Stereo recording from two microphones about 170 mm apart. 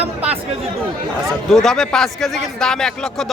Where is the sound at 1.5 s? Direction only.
Centre (ahead or behind).